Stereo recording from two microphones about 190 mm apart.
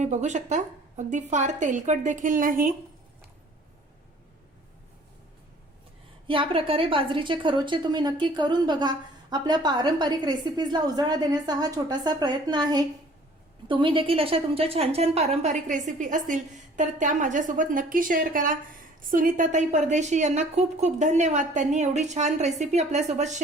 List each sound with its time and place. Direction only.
0.0 s a woman's voice: 40° right (ahead or behind)
6.2 s a woman's voice: 25° right (ahead or behind)